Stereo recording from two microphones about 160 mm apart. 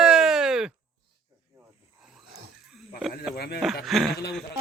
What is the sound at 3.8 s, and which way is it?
Speech, centre (ahead or behind).